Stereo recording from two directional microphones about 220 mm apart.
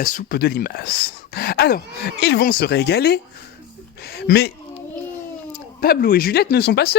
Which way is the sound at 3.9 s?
45° left (ahead or behind).